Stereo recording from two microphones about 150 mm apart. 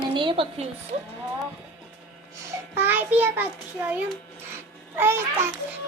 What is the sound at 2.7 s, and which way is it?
Speech, 15° right (ahead or behind).